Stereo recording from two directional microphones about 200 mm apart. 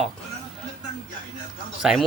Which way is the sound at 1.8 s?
5° right (ahead or behind).